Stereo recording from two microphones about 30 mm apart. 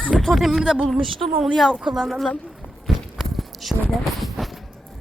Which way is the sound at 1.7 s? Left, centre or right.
Centre.